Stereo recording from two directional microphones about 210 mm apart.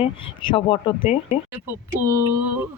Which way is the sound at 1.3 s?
10° right (ahead or behind).